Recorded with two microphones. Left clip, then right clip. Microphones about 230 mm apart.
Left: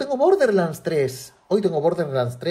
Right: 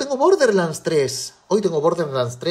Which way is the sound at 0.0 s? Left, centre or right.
Centre.